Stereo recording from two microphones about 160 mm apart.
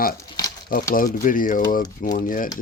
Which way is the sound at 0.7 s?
60° left (ahead or behind).